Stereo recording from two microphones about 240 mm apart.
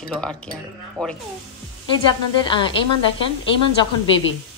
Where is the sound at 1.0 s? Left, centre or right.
Centre.